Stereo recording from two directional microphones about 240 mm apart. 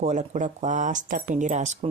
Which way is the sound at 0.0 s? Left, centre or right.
Right.